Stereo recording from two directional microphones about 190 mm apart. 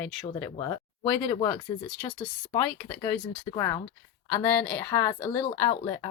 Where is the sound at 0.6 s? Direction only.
25° left (ahead or behind).